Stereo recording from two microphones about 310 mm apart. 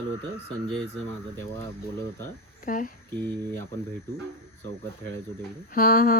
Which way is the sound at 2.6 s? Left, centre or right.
Left.